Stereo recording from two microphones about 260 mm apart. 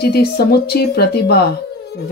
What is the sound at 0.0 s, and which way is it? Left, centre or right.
Speech, left.